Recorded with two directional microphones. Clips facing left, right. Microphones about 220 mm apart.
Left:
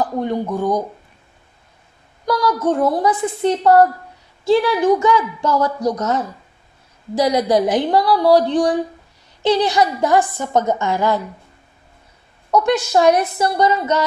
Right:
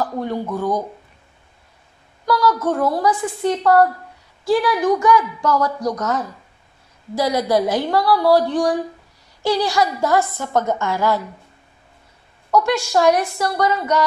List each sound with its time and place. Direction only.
0.0 s speech: 15° left (ahead or behind)
2.2 s speech: 15° left (ahead or behind)
12.4 s speech: 20° left (ahead or behind)